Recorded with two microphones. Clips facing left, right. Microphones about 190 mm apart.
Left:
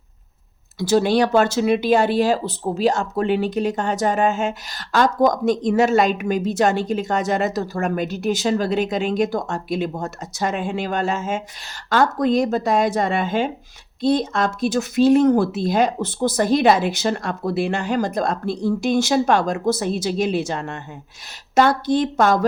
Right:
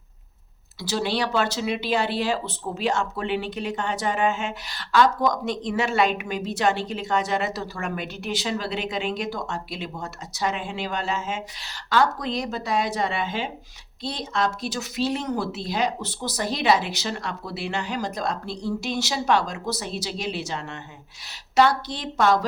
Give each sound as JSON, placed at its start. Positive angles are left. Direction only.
{"t": 0.8, "sound": "speech", "side_deg": 45}